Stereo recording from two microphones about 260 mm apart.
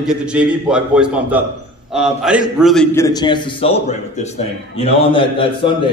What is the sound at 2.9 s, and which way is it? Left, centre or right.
A man's voice, centre.